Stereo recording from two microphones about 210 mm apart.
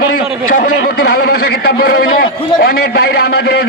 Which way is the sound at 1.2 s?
45° left (ahead or behind).